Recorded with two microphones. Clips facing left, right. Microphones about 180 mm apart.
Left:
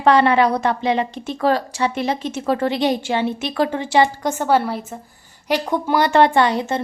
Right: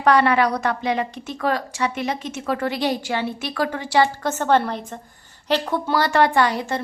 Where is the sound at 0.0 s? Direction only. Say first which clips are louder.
Left 3 dB; 25° left (ahead or behind).